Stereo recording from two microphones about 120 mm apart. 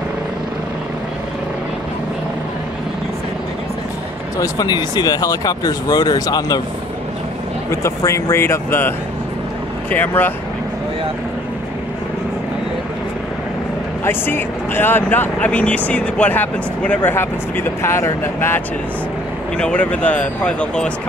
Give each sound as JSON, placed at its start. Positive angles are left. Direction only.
{"t": 4.4, "sound": "speech", "side_deg": 35}
{"t": 7.7, "sound": "speech", "side_deg": 25}
{"t": 14.0, "sound": "speech", "side_deg": 15}
{"t": 19.5, "sound": "speech", "side_deg": 10}